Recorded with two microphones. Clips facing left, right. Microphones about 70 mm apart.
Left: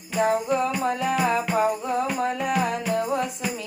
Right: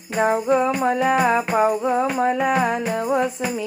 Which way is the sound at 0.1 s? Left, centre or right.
Right.